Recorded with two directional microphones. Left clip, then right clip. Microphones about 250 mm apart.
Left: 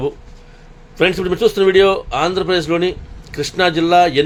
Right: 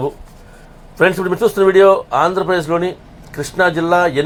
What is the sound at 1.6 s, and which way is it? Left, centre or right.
Speech, centre.